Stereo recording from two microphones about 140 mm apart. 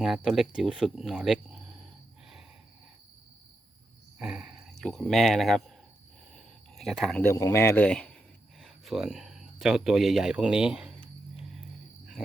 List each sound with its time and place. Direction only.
0.0 s speech: centre (ahead or behind)
4.2 s speech: 5° right (ahead or behind)
6.3 s a sound: centre (ahead or behind)
7.2 s speech: 20° left (ahead or behind)
7.9 s speech: 5° left (ahead or behind)